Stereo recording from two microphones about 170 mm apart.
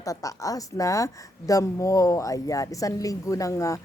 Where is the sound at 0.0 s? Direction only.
20° left (ahead or behind).